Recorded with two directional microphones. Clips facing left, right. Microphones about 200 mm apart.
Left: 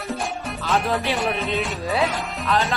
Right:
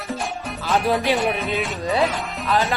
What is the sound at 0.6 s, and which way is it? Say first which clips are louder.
Speech: right 2 dB; centre (ahead or behind).